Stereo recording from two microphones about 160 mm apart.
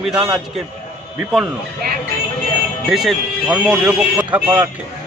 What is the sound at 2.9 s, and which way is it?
A man's voice, centre (ahead or behind).